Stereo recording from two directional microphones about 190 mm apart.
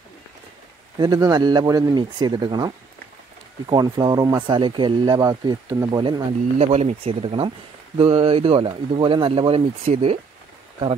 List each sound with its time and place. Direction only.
0.9 s speech: 20° right (ahead or behind)
6.6 s speech: 35° right (ahead or behind)